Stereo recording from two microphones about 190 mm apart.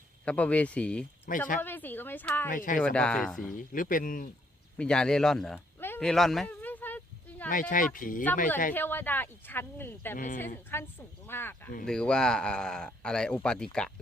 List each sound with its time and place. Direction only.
0.3 s speech: 5° left (ahead or behind)
1.3 s speech: 45° left (ahead or behind)
1.6 s speech: 10° left (ahead or behind)
2.5 s speech: 45° left (ahead or behind)
2.8 s speech: 5° left (ahead or behind)
3.5 s speech: 45° left (ahead or behind)
4.8 s speech: 5° left (ahead or behind)
5.5 s a sound: 10° left (ahead or behind)
7.5 s speech: 45° left (ahead or behind)
8.7 s speech: 10° left (ahead or behind)